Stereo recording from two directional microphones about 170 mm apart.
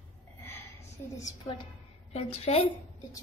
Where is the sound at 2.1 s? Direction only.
35° left (ahead or behind).